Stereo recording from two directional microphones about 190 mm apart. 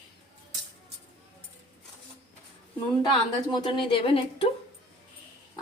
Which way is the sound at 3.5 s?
25° left (ahead or behind).